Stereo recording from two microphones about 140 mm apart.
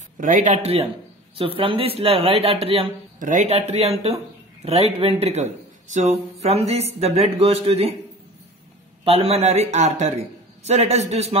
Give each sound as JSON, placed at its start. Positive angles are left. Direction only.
{"t": 0.2, "sound": "speech", "side_deg": -65}
{"t": 1.4, "sound": "a man's voice", "side_deg": -40}
{"t": 3.2, "sound": "a man's voice", "side_deg": -65}
{"t": 9.0, "sound": "a man's voice", "side_deg": -45}